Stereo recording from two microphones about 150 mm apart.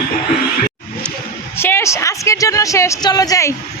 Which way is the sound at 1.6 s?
15° left (ahead or behind).